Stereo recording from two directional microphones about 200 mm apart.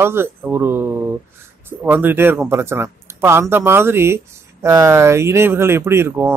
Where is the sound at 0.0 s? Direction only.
10° right (ahead or behind).